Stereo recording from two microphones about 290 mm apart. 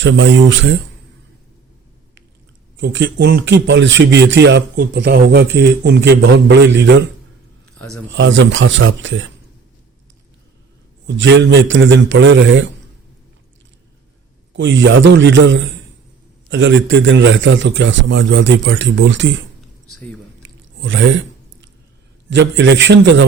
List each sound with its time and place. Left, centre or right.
0.0 s speech: right
2.7 s speech: right
7.8 s speech: centre
8.1 s speech: right
11.0 s speech: right
14.5 s speech: right
20.4 s a sound: right
22.3 s speech: right